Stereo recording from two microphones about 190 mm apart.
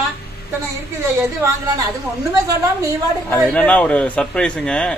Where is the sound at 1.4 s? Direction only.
20° right (ahead or behind).